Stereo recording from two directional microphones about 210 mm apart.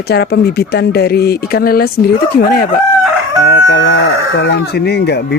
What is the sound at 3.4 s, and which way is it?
Chicken, 60° left (ahead or behind).